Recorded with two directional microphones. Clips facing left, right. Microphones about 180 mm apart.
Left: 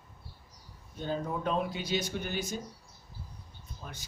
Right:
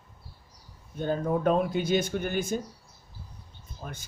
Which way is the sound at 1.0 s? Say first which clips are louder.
Right 7 dB; 50° right (ahead or behind).